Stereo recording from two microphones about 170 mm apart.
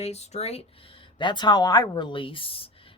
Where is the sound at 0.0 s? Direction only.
40° left (ahead or behind).